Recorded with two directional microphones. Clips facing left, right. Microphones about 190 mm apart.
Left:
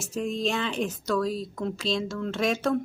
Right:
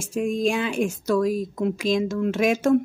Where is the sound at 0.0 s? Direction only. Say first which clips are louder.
Right 5 dB; 10° right (ahead or behind).